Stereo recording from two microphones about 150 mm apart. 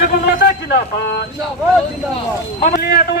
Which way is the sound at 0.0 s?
75° left (ahead or behind).